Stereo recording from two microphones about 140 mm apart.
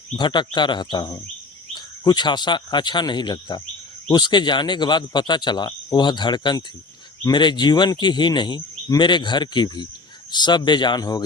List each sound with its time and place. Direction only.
0.2 s speech: 35° left (ahead or behind)